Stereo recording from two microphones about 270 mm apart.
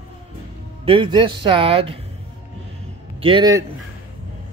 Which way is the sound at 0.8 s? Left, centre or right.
Centre.